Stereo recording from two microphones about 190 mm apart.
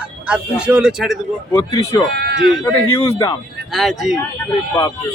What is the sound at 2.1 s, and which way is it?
Speech, 60° right (ahead or behind).